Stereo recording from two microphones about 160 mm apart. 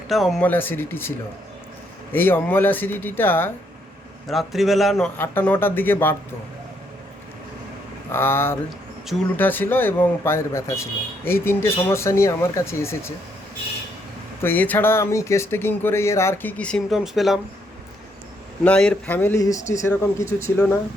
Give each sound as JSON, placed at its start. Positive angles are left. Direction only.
{"t": 0.1, "sound": "a man's voice", "side_deg": 0}
{"t": 0.4, "sound": "speech", "side_deg": 10}
{"t": 2.1, "sound": "speech", "side_deg": 10}
{"t": 4.3, "sound": "a man's voice", "side_deg": 0}
{"t": 5.1, "sound": "speech", "side_deg": 15}
{"t": 8.1, "sound": "speech", "side_deg": 15}
{"t": 14.4, "sound": "speech", "side_deg": 10}
{"t": 18.6, "sound": "speech", "side_deg": 5}